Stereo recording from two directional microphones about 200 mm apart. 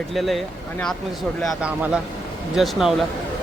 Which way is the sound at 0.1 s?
Centre (ahead or behind).